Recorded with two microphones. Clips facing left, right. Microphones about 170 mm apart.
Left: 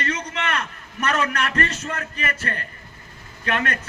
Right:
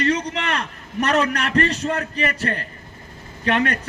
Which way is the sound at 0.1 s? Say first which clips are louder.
Right 4 dB; 35° right (ahead or behind).